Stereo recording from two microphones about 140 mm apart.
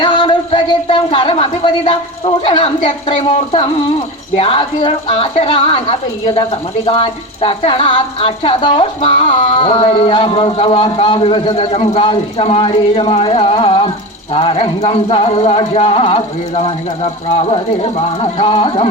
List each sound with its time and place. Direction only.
0.0 s speech: 30° left (ahead or behind)